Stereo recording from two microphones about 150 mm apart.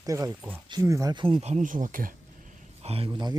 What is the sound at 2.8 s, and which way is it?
Speech, 40° right (ahead or behind).